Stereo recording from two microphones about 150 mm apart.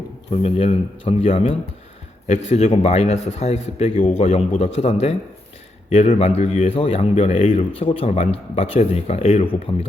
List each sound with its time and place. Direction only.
0.3 s a man's voice: 40° left (ahead or behind)